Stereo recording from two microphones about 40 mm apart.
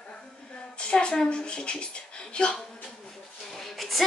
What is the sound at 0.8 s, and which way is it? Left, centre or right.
A woman's voice, left.